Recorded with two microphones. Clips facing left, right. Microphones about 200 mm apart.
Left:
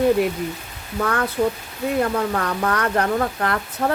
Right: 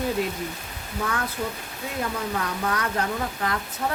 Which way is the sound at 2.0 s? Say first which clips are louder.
Left 6 dB; 60° left (ahead or behind).